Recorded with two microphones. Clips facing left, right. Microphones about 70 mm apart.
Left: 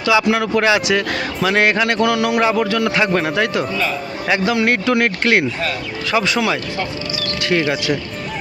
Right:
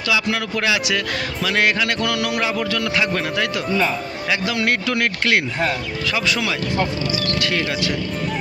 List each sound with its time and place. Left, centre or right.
0.1 s speech: left